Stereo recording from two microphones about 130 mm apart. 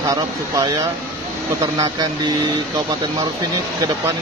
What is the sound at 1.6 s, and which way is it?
Speech, 30° right (ahead or behind).